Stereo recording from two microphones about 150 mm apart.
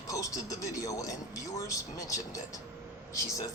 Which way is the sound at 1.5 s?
20° left (ahead or behind).